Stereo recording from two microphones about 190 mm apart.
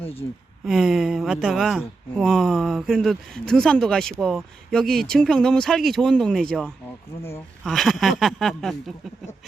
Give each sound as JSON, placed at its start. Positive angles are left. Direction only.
{"t": 0.0, "sound": "speech", "side_deg": 30}
{"t": 0.6, "sound": "speech", "side_deg": 0}